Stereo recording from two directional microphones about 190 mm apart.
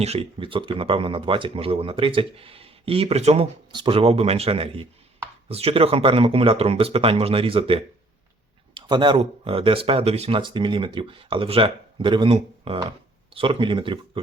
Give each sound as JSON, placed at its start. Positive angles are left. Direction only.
{"t": 0.0, "sound": "speech", "side_deg": -30}